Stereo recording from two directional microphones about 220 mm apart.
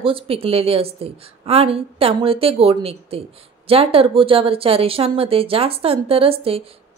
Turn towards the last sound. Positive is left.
turn(degrees=-25)  # may be behind; listen again after turning